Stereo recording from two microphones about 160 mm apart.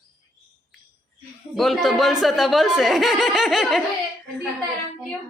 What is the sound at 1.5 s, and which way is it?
Speech, centre (ahead or behind).